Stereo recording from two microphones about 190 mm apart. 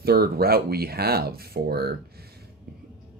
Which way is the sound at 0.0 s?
55° right (ahead or behind).